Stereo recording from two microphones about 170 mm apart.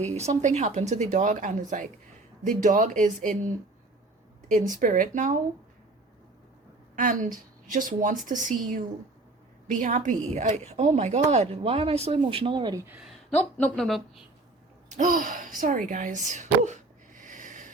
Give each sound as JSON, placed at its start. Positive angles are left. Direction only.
{"t": 0.1, "sound": "speech", "side_deg": -40}
{"t": 6.9, "sound": "speech", "side_deg": -50}
{"t": 13.3, "sound": "speech", "side_deg": 5}
{"t": 14.9, "sound": "a sound", "side_deg": -50}